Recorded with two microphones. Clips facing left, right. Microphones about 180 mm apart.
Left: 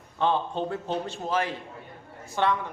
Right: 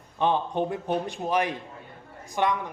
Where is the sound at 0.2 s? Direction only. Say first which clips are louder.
Right 1 dB; 15° right (ahead or behind).